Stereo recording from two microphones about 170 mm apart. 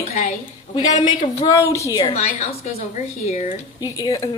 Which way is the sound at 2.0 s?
40° left (ahead or behind).